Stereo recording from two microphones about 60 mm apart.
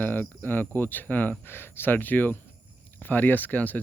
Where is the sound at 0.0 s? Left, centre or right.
Left.